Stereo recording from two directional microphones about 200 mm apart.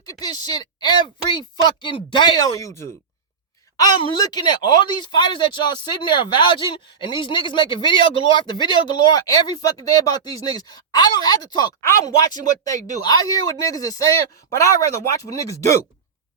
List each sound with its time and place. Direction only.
0.1 s speech: 20° left (ahead or behind)
13.0 s speech: 20° left (ahead or behind)